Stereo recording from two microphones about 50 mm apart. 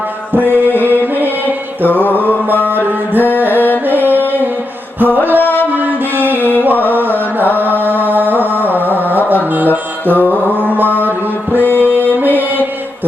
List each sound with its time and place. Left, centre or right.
0.3 s music: right
2.7 s mantra: right
3.8 s music: right
5.4 s music: left
5.7 s music: right
6.9 s carnatic music: right
7.6 s mantra: right
10.2 s music: right